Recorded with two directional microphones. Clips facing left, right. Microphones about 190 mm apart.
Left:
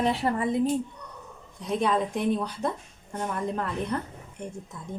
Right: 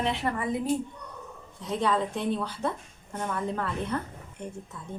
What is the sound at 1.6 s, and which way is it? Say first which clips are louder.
Speech: left 2 dB; 15° left (ahead or behind).